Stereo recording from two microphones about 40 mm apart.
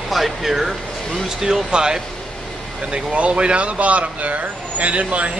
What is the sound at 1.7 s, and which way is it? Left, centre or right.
Speech, centre.